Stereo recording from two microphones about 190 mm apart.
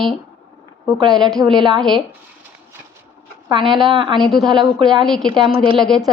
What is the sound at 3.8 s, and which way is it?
Speech, 25° right (ahead or behind).